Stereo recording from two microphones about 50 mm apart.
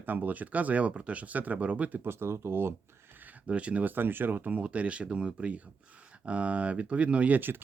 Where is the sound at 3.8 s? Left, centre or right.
Right.